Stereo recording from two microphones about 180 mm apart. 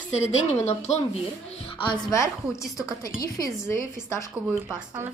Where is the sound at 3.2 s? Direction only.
20° left (ahead or behind).